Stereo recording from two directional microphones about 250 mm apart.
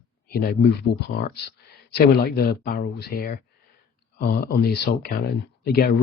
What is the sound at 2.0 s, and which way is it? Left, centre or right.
Speech, left.